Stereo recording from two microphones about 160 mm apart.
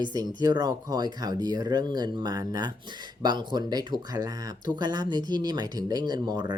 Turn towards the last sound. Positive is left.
turn(degrees=-25)  # may be behind; listen again after turning